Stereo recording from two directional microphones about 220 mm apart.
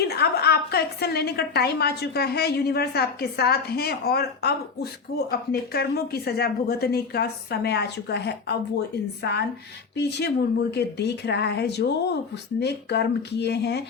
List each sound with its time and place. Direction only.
0.0 s a woman's voice: 45° left (ahead or behind)
10.0 s a woman's voice: 50° left (ahead or behind)